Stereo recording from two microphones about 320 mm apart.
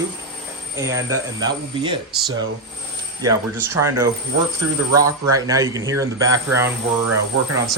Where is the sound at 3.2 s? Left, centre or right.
Centre.